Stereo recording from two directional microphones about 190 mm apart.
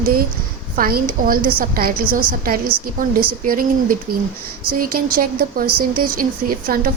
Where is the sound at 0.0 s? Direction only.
50° right (ahead or behind).